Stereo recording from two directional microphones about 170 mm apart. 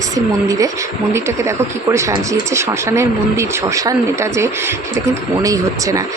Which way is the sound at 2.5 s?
15° right (ahead or behind).